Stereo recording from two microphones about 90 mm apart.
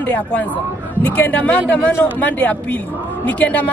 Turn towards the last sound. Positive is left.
turn(degrees=15)  # may be behind; listen again after turning